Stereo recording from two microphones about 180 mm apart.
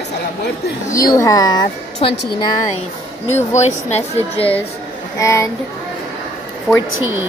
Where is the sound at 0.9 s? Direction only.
20° left (ahead or behind).